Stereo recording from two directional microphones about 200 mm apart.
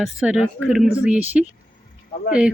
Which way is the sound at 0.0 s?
Centre (ahead or behind).